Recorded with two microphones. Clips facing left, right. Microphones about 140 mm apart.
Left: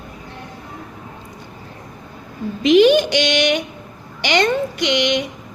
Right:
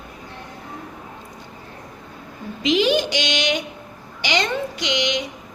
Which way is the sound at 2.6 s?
55° left (ahead or behind).